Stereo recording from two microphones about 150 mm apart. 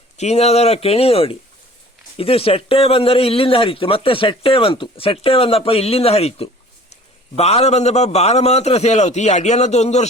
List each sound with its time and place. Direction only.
0.2 s a man's voice: 45° left (ahead or behind)